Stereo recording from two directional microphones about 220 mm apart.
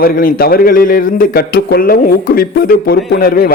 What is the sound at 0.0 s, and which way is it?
A man's voice, 40° left (ahead or behind).